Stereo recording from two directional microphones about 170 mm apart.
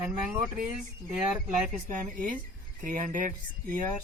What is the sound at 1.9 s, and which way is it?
Speech, 50° right (ahead or behind).